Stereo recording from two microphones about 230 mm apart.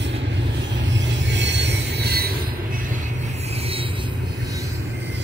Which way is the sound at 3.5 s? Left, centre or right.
Right.